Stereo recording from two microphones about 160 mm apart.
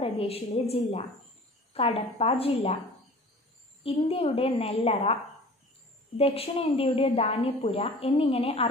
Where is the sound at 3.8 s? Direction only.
35° left (ahead or behind).